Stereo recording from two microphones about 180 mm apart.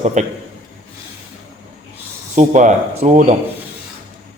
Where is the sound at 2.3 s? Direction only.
40° right (ahead or behind).